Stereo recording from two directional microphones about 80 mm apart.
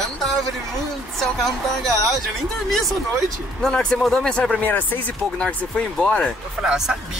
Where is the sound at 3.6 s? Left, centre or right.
Centre.